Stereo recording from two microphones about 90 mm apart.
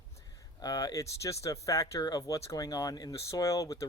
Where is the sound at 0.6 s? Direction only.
45° left (ahead or behind).